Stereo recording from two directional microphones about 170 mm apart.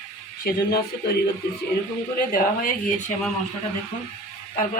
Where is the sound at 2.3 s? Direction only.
50° left (ahead or behind).